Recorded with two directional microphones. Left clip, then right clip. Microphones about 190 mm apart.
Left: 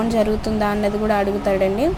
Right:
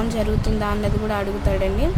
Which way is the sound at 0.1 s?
15° left (ahead or behind).